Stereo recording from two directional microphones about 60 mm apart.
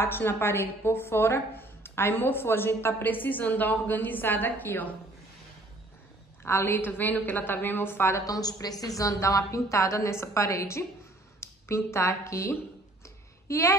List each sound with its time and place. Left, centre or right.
0.0 s speech: left
6.4 s speech: left
8.3 s a woman's voice: left